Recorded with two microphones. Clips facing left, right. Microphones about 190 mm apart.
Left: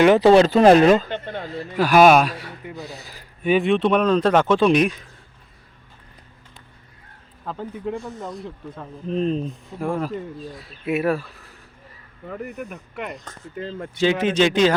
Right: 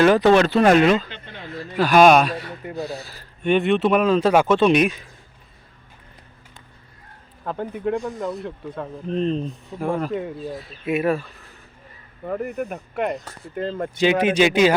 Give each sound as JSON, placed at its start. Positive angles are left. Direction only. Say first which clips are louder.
{"t": 0.2, "sound": "speech", "louder": "left 2 dB", "side_deg": 30}
{"t": 1.6, "sound": "speech", "louder": "even", "side_deg": 10}
{"t": 3.4, "sound": "speech", "louder": "even", "side_deg": 0}
{"t": 7.4, "sound": "speech", "louder": "right 4 dB", "side_deg": -60}
{"t": 9.0, "sound": "speech", "louder": "left 1 dB", "side_deg": 5}
{"t": 12.2, "sound": "speech", "louder": "right 6 dB", "side_deg": -45}
{"t": 13.2, "sound": "speech", "louder": "right 1 dB", "side_deg": -10}
{"t": 13.6, "sound": "speech", "louder": "right 5 dB", "side_deg": -50}
{"t": 14.0, "sound": "speech", "louder": "right 1 dB", "side_deg": -15}